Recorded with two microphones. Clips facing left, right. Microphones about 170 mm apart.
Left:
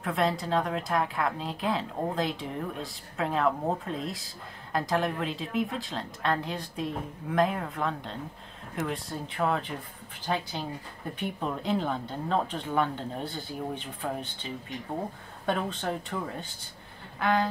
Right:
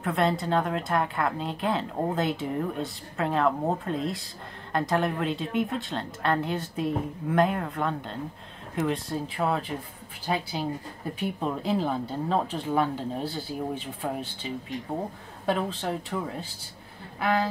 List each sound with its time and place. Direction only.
0.0 s a woman's voice: centre (ahead or behind)